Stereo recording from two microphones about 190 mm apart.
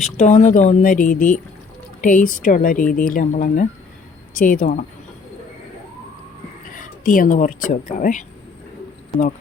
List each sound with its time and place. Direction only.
0.0 s speech: 40° left (ahead or behind)
6.7 s speech: 45° left (ahead or behind)